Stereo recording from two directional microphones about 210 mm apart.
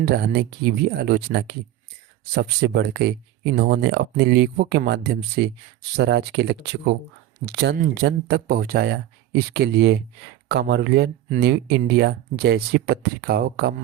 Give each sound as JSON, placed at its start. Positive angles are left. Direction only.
{"t": 0.0, "sound": "speech", "side_deg": -50}